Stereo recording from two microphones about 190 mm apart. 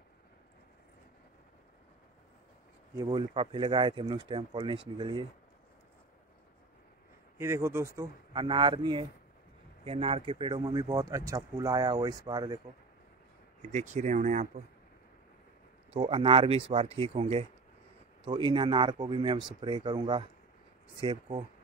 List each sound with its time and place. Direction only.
3.0 s speech: 25° right (ahead or behind)
7.3 s speech: 15° right (ahead or behind)
13.7 s speech: 40° right (ahead or behind)
15.9 s speech: 30° right (ahead or behind)